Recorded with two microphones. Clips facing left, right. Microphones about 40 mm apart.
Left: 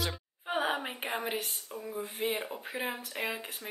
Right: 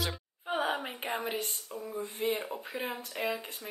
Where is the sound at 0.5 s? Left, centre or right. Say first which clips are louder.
Even; centre.